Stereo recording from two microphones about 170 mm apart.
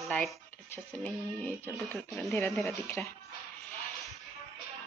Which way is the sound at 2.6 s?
15° left (ahead or behind).